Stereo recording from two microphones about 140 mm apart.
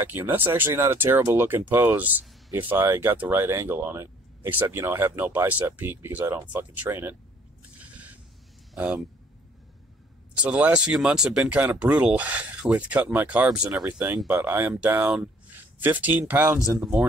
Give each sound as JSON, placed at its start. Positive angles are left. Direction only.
{"t": 0.0, "sound": "speech", "side_deg": -15}
{"t": 7.8, "sound": "a sound", "side_deg": -10}
{"t": 8.7, "sound": "speech", "side_deg": -10}
{"t": 10.3, "sound": "speech", "side_deg": -10}